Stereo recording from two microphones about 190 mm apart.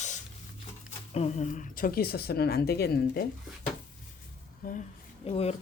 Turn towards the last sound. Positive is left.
turn(degrees=30)  # may be behind; listen again after turning